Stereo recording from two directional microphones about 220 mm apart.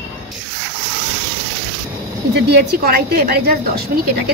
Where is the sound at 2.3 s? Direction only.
50° right (ahead or behind).